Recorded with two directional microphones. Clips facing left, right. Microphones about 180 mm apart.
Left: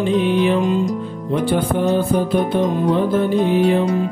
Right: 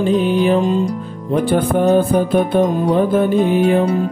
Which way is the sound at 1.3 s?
45° right (ahead or behind).